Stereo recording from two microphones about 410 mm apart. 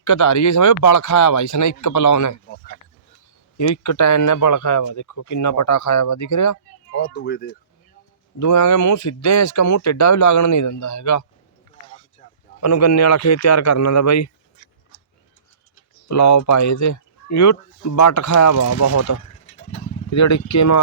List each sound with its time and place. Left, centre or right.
0.0 s speech: left
3.6 s speech: left
6.9 s speech: left
8.4 s speech: left
12.5 s speech: left
16.0 s speech: left